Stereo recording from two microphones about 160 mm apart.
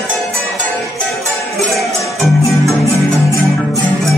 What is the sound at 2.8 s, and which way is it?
Music, 20° left (ahead or behind).